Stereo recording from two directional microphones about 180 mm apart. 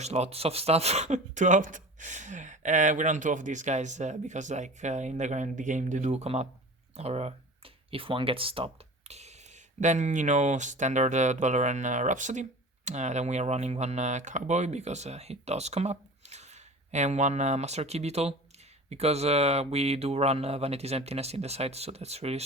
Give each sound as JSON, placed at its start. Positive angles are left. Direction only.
{"t": 0.0, "sound": "speech", "side_deg": -35}